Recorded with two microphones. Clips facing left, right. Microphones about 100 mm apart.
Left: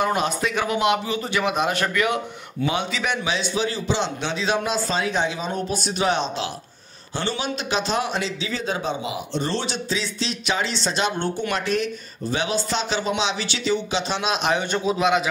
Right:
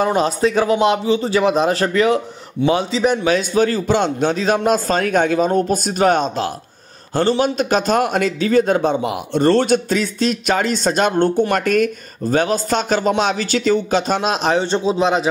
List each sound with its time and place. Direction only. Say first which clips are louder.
0.0 s a man's voice: right 6 dB; 35° right (ahead or behind)